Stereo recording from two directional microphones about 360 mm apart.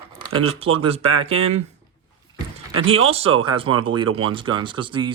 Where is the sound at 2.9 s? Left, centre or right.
Centre.